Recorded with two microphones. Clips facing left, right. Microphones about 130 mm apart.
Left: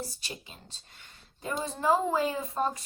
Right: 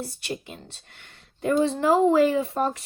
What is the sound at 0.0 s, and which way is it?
A woman's voice, 60° right (ahead or behind).